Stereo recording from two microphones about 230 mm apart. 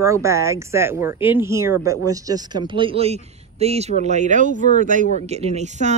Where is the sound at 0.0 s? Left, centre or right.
Centre.